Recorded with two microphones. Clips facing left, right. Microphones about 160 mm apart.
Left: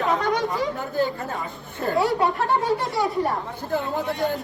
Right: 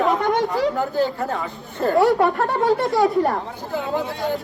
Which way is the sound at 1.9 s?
70° right (ahead or behind).